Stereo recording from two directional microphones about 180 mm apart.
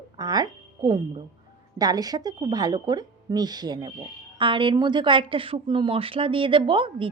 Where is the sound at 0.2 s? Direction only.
20° right (ahead or behind).